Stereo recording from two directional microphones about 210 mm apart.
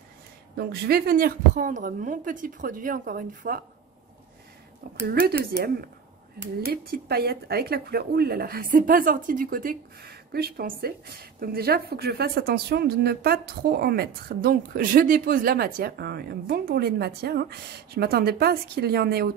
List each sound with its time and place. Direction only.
0.6 s a woman's voice: 50° right (ahead or behind)
5.0 s speech: 45° right (ahead or behind)